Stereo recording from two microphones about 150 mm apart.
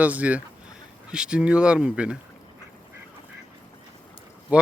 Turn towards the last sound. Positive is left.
turn(degrees=-10)  # may be behind; listen again after turning